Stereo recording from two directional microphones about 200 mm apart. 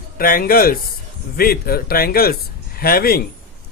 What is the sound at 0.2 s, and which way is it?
Speech, 45° left (ahead or behind).